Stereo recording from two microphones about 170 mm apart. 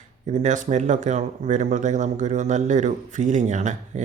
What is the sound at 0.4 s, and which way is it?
Speech, 45° right (ahead or behind).